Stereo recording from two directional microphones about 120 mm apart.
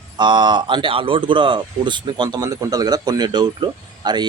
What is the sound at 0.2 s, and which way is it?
Speech, 40° right (ahead or behind).